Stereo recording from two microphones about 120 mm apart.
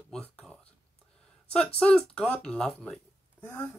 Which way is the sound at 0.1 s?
10° left (ahead or behind).